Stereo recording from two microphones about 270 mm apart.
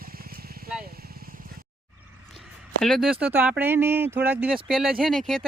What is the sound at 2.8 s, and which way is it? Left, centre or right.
Speech, centre.